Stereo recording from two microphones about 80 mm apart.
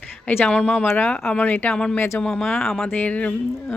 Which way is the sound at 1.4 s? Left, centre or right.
Left.